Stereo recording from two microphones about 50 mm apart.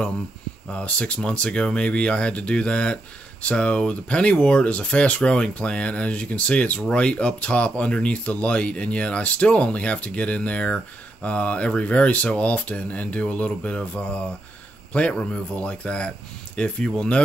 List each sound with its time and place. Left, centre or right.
0.7 s speech: left